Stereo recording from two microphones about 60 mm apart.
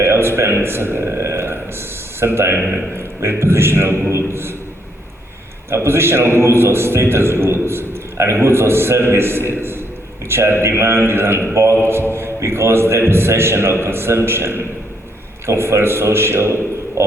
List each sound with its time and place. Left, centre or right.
0.0 s a sound: right
2.2 s a man's voice: right
5.7 s a man's voice: right